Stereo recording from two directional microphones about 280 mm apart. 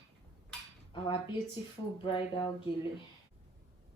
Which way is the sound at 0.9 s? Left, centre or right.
Centre.